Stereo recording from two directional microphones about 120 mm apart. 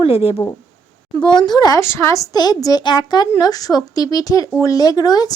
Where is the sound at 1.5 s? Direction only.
35° left (ahead or behind).